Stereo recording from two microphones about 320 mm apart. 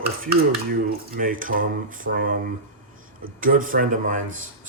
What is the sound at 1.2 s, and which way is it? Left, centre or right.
Speech, right.